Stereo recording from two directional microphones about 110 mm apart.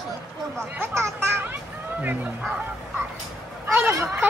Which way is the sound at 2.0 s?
15° right (ahead or behind).